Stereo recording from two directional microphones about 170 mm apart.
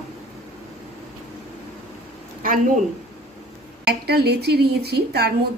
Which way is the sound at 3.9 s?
70° right (ahead or behind).